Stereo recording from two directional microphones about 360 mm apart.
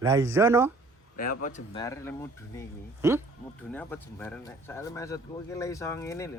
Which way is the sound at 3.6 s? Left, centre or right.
Centre.